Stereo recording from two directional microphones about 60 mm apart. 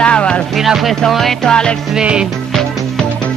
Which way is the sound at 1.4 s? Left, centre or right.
Centre.